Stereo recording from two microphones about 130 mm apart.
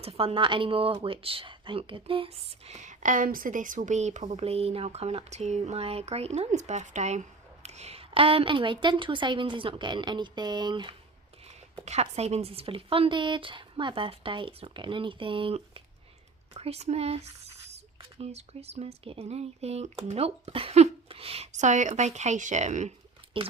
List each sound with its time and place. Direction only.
0.0 s a woman's voice: 50° right (ahead or behind)
11.9 s speech: 55° right (ahead or behind)
23.3 s a woman's voice: 40° right (ahead or behind)